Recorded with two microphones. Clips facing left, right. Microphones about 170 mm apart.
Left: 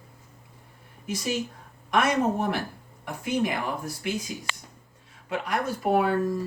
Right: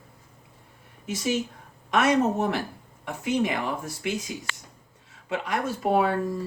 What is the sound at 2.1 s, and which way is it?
Speech, 20° right (ahead or behind).